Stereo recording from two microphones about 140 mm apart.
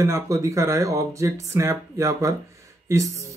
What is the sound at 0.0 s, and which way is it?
Speech, 20° right (ahead or behind).